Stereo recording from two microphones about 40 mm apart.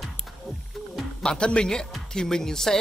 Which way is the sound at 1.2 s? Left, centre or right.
Left.